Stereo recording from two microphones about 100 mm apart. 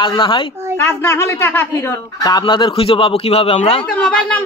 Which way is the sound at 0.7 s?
25° left (ahead or behind).